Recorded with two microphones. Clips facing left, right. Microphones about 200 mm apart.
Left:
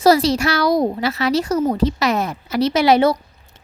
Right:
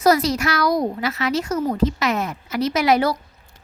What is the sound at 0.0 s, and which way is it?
A woman's voice, 30° left (ahead or behind).